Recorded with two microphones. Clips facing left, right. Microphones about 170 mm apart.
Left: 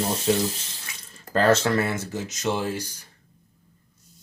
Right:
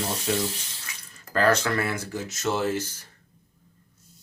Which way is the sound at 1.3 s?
25° left (ahead or behind).